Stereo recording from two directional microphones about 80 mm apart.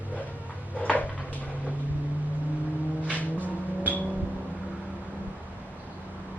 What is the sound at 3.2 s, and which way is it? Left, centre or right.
Vehicle, centre.